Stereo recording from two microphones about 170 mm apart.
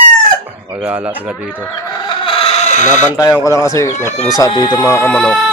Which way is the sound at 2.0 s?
30° left (ahead or behind).